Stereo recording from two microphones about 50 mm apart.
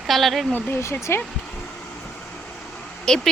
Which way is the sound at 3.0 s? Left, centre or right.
Centre.